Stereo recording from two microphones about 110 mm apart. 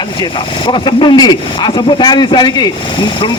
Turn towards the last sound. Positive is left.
turn(degrees=40)  # may be behind; listen again after turning